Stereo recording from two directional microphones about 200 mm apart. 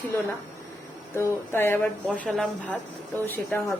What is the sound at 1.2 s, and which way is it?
A woman's voice, 10° left (ahead or behind).